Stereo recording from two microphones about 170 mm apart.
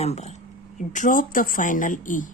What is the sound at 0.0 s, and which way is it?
Speech, 40° left (ahead or behind).